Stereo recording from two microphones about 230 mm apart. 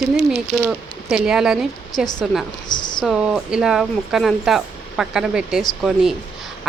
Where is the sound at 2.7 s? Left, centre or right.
Centre.